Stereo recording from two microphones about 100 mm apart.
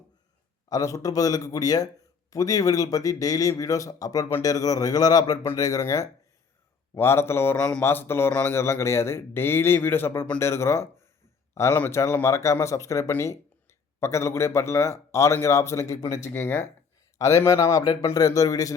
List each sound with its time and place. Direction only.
0.7 s speech: 35° left (ahead or behind)
6.9 s speech: 25° left (ahead or behind)
16.3 s speech: 20° left (ahead or behind); by 18.7 s 35° left (ahead or behind)